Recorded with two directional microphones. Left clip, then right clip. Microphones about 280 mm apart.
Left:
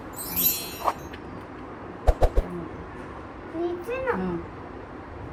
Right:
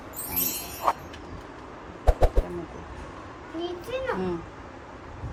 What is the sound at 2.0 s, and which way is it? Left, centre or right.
Bird, centre.